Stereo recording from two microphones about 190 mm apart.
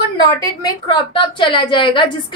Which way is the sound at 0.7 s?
25° left (ahead or behind).